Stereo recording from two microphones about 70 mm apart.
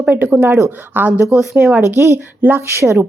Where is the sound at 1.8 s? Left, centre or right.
Right.